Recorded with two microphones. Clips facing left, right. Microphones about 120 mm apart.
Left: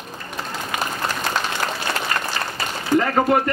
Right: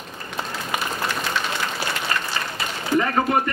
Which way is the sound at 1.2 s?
40° left (ahead or behind).